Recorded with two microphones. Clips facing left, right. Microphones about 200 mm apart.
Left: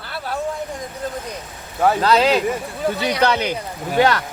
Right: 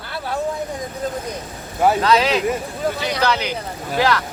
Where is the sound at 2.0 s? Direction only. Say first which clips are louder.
Left 1 dB; 35° left (ahead or behind).